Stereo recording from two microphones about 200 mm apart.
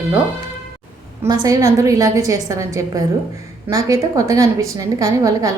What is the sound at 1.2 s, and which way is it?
A woman's voice, 20° right (ahead or behind).